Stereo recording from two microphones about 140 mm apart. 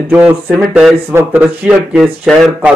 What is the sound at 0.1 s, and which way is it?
A man's voice, 10° right (ahead or behind).